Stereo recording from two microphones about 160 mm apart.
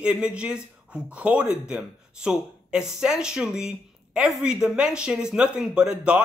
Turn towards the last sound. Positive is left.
turn(degrees=-5)  # may be behind; listen again after turning